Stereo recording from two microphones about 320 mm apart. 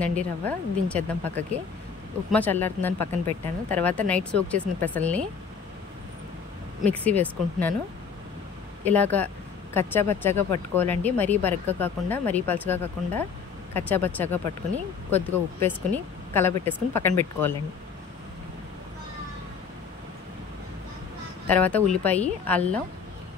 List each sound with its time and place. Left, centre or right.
0.0 s speech: centre
3.1 s speech: right
3.7 s speech: centre
6.9 s speech: centre
8.8 s speech: centre
21.5 s speech: centre